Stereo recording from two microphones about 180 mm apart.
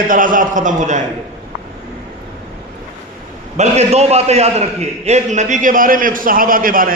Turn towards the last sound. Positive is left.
turn(degrees=-50)  # may be behind; listen again after turning